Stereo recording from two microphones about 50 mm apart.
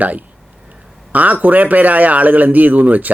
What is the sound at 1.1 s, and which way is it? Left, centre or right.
Speech, right.